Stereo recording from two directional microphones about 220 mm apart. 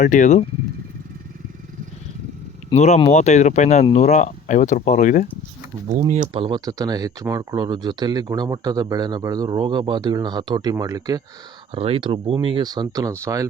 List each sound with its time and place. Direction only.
0.0 s speech: 35° left (ahead or behind)
2.6 s speech: 30° left (ahead or behind)
6.1 s speech: 30° right (ahead or behind)